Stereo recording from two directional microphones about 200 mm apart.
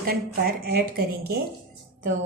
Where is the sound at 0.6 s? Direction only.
50° right (ahead or behind).